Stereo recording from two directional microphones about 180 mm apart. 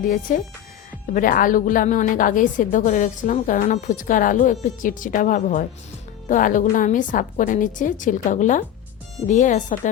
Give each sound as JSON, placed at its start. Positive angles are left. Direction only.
{"t": 0.0, "sound": "a woman's voice", "side_deg": 50}